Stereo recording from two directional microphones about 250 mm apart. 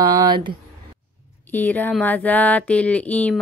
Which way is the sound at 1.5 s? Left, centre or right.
Centre.